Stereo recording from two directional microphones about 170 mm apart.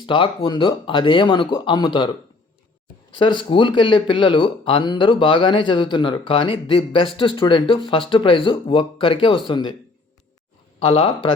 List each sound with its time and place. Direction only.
0.0 s speech: 30° left (ahead or behind)
3.1 s speech: 30° left (ahead or behind)
10.8 s speech: 30° left (ahead or behind)